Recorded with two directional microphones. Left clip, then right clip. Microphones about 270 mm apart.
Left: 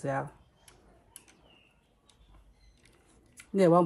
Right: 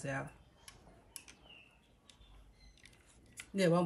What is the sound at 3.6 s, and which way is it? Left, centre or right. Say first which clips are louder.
Speech: left 9 dB; centre.